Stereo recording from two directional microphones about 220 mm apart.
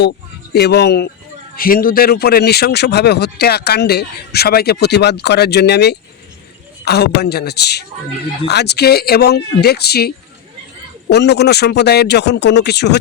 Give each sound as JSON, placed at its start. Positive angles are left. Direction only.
{"t": 0.5, "sound": "speech", "side_deg": 50}
{"t": 11.1, "sound": "speech", "side_deg": 50}